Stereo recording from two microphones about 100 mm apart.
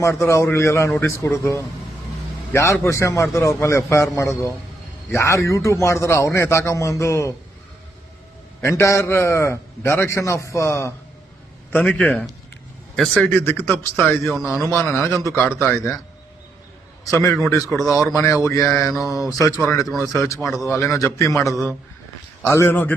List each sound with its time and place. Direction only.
0.0 s a man's voice: 30° left (ahead or behind)
8.6 s a man's voice: 30° left (ahead or behind)
11.7 s a man's voice: 10° left (ahead or behind)
12.0 s a man's voice: centre (ahead or behind)
13.4 s a man's voice: 20° left (ahead or behind)
17.1 s a man's voice: 30° left (ahead or behind)
17.7 s speech: centre (ahead or behind)
17.9 s a man's voice: 30° left (ahead or behind)